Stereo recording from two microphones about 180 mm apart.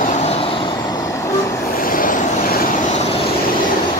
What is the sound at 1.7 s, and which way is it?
Vehicle, 50° left (ahead or behind).